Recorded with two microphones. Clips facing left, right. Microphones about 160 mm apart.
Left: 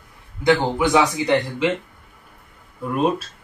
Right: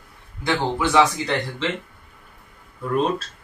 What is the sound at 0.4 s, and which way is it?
Speech, 20° left (ahead or behind).